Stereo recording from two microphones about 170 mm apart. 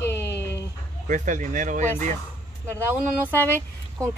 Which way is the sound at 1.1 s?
50° right (ahead or behind).